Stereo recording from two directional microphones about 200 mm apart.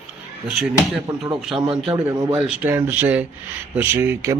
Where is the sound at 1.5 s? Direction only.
25° right (ahead or behind).